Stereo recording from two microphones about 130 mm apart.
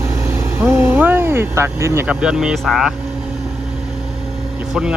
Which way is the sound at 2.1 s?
5° right (ahead or behind).